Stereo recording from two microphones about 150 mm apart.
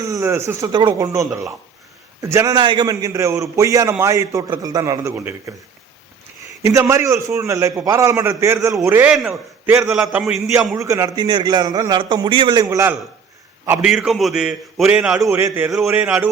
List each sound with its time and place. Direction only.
0.0 s a man's voice: 20° right (ahead or behind)
6.6 s a man's voice: 20° right (ahead or behind)
9.1 s a man's voice: centre (ahead or behind)
10.8 s a man's voice: 20° right (ahead or behind)
12.7 s a man's voice: 15° right (ahead or behind)
13.8 s a man's voice: 5° right (ahead or behind)
15.3 s a man's voice: 15° right (ahead or behind)